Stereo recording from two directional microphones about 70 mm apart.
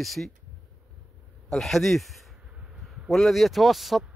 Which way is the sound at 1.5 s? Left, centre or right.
Centre.